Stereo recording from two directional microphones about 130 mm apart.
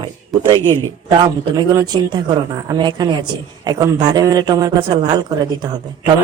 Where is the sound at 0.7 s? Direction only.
35° right (ahead or behind).